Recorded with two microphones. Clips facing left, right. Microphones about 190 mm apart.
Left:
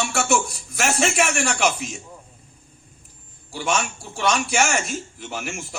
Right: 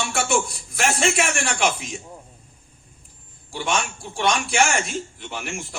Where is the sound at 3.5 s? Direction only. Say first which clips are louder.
Left 1 dB; 45° left (ahead or behind).